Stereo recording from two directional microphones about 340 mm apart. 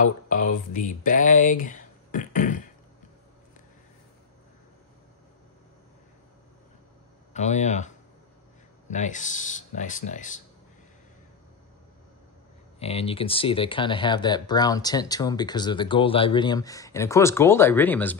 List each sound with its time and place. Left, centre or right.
0.0 s speech: left
7.3 s speech: centre
12.7 s speech: centre